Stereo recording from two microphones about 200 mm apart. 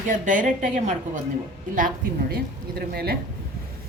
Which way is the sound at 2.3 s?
55° right (ahead or behind).